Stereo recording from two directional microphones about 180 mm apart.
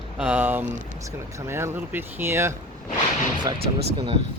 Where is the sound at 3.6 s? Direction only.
65° right (ahead or behind).